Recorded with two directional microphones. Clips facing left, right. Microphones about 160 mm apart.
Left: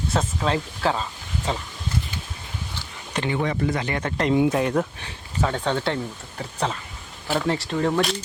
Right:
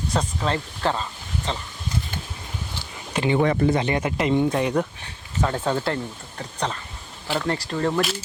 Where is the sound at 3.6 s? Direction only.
25° right (ahead or behind).